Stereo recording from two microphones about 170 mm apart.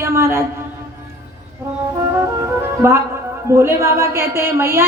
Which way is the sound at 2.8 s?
15° right (ahead or behind).